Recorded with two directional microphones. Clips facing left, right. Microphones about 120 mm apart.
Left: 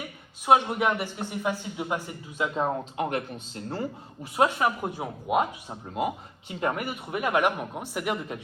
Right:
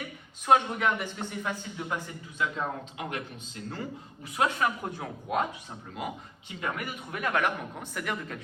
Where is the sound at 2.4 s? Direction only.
40° left (ahead or behind).